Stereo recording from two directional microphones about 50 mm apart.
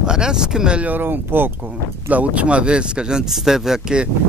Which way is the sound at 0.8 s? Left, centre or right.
Right.